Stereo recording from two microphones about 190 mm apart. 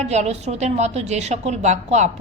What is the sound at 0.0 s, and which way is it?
A woman's voice, 35° right (ahead or behind).